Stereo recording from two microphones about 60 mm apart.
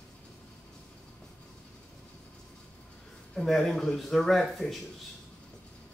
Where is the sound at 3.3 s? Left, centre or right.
Centre.